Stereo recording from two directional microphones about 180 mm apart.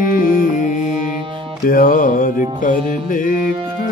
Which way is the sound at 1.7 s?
50° left (ahead or behind).